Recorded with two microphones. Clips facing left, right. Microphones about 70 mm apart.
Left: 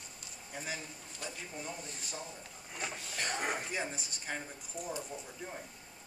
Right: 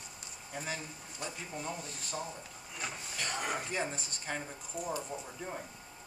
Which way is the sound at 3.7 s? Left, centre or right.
Centre.